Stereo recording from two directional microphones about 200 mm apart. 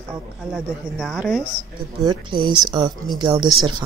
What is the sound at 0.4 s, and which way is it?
Speech, 5° right (ahead or behind).